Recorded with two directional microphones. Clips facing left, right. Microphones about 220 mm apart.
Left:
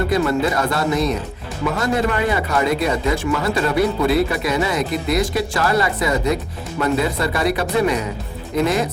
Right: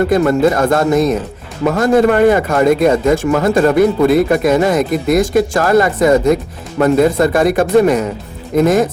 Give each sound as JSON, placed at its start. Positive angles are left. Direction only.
{"t": 0.1, "sound": "speech", "side_deg": -50}